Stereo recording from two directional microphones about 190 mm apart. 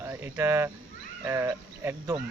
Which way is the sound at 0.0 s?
15° right (ahead or behind).